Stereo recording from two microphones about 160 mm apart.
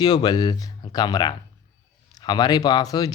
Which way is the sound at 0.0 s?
25° left (ahead or behind).